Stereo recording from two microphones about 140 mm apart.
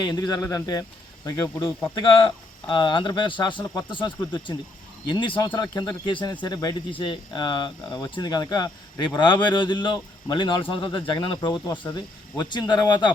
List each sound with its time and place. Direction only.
0.0 s a man's voice: 30° left (ahead or behind)
2.6 s speech: 35° left (ahead or behind)